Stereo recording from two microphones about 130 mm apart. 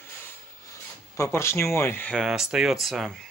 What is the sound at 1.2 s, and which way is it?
Speech, 20° left (ahead or behind).